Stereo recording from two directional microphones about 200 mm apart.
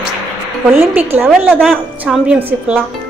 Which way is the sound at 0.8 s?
10° right (ahead or behind).